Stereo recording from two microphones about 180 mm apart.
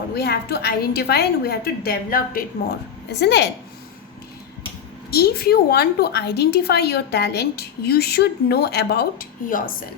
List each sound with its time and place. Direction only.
0.1 s a woman's voice: 60° left (ahead or behind)
5.1 s a woman's voice: 60° left (ahead or behind)